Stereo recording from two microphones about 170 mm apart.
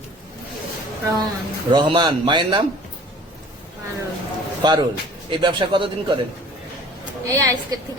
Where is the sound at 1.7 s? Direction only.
30° right (ahead or behind).